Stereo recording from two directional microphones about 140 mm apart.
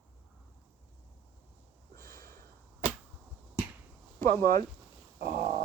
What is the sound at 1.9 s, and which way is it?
Sniff, 90° right.